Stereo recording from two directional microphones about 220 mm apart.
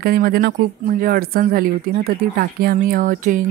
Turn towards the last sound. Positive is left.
turn(degrees=-35)  # may be behind; listen again after turning